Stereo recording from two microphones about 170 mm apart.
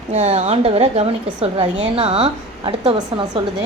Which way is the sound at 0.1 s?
40° right (ahead or behind).